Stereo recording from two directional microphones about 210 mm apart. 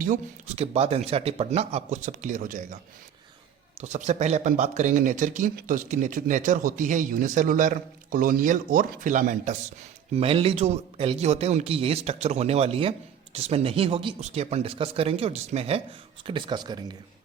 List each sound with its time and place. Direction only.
0.0 s speech: 35° right (ahead or behind)
3.8 s a man's voice: 35° right (ahead or behind)